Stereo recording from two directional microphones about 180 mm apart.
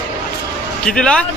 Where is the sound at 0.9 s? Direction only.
5° left (ahead or behind).